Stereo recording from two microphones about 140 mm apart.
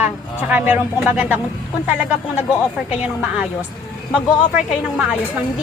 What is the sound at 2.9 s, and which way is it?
A woman's voice, 10° right (ahead or behind).